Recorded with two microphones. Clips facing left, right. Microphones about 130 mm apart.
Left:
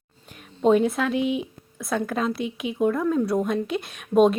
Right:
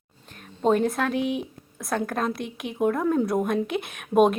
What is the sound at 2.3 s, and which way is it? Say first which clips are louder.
Speech: left 4 dB; 50° right (ahead or behind).